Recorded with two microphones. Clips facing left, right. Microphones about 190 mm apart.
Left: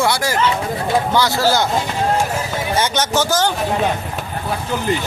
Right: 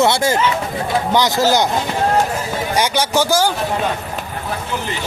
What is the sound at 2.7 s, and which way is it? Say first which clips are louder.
Speech: right 1 dB; 10° right (ahead or behind).